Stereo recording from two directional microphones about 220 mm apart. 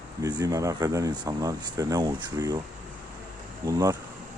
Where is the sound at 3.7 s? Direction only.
15° right (ahead or behind).